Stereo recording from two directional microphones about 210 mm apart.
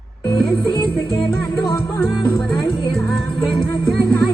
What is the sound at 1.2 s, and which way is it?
Music, 20° left (ahead or behind).